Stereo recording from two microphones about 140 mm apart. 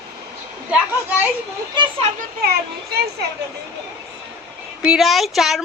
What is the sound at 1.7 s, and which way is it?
Speech, 35° right (ahead or behind).